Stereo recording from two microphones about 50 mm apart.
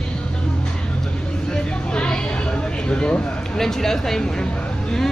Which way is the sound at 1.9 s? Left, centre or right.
Centre.